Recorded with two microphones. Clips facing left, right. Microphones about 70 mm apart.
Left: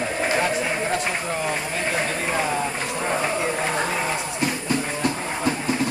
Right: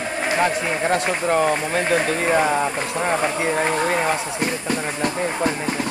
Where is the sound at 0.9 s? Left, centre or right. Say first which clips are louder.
Right 6 dB; right.